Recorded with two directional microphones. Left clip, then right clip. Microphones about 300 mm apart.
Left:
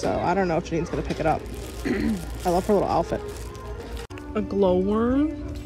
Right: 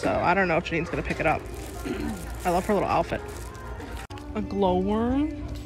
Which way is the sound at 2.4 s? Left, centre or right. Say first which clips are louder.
Left 2 dB; centre.